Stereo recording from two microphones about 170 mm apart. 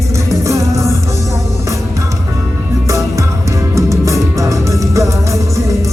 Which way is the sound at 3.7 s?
20° right (ahead or behind).